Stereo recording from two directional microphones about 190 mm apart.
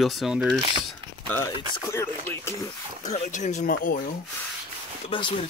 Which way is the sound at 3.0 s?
40° left (ahead or behind).